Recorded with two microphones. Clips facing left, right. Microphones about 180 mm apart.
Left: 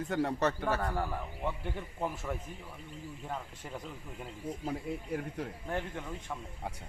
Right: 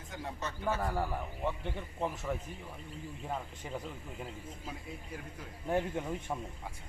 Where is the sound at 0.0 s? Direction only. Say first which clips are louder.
Left 11 dB; 65° left (ahead or behind).